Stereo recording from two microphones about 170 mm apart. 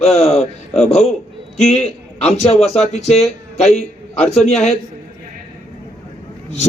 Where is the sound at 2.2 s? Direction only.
40° left (ahead or behind).